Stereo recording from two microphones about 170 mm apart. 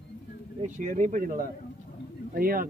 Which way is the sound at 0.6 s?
50° right (ahead or behind).